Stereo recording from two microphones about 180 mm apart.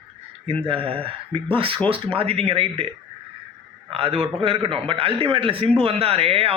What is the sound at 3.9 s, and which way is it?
A man's voice, 35° right (ahead or behind).